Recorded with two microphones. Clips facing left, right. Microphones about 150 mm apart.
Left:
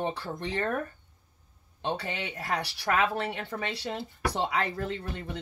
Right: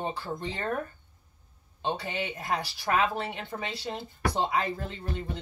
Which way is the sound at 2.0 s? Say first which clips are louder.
Right 2 dB; 65° left (ahead or behind).